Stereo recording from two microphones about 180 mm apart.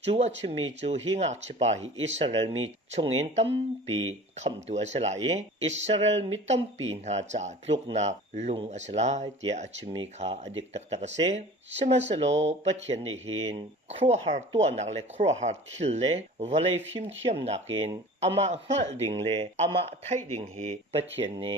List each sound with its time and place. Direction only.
0.0 s speech: 35° right (ahead or behind)